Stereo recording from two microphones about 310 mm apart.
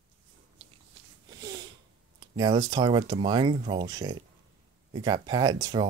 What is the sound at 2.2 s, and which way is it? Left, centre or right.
Speech, centre.